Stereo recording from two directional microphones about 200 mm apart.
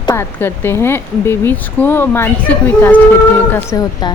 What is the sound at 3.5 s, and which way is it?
Speech, 20° left (ahead or behind).